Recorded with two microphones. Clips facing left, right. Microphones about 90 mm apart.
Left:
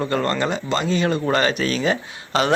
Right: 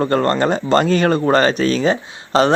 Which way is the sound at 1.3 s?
35° right (ahead or behind).